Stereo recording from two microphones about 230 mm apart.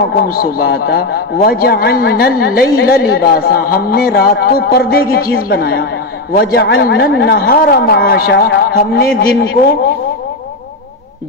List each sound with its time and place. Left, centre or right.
0.0 s a man's voice: left